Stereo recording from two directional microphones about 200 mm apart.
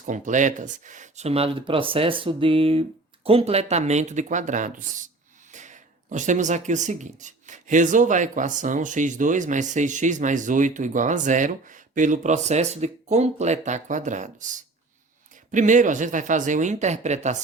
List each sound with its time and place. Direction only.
0.0 s speech: 40° right (ahead or behind)